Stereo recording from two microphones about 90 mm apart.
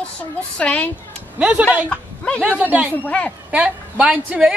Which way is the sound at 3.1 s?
15° left (ahead or behind).